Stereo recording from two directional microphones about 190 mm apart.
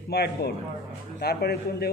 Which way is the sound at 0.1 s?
55° left (ahead or behind).